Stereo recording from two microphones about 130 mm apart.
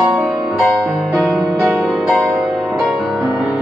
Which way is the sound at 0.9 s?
5° right (ahead or behind).